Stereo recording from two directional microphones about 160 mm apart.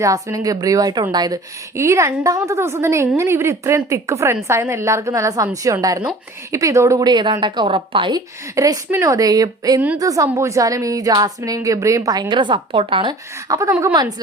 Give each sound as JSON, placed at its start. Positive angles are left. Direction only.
{"t": 0.0, "sound": "a woman's voice", "side_deg": -20}
{"t": 8.5, "sound": "a woman's voice", "side_deg": -20}
{"t": 13.5, "sound": "a woman's voice", "side_deg": -20}